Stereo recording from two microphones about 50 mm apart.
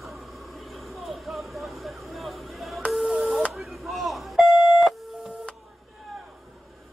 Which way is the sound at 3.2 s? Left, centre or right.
Centre.